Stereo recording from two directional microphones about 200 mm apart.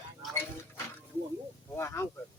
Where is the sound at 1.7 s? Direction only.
15° left (ahead or behind).